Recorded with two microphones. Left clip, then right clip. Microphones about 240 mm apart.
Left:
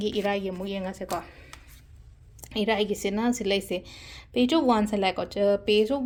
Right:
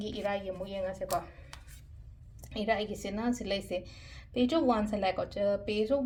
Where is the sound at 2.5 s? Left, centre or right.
Left.